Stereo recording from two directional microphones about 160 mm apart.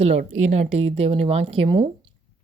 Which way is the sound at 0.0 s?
45° right (ahead or behind).